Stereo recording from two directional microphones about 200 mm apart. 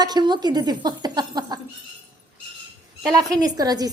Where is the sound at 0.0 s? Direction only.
20° right (ahead or behind).